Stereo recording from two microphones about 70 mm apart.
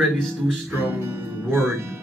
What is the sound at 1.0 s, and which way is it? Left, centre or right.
Speech, right.